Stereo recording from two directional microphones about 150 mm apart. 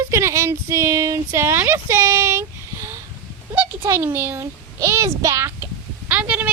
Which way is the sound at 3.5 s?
15° right (ahead or behind).